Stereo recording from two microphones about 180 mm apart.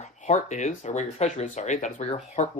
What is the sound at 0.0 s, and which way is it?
Speech, 40° left (ahead or behind).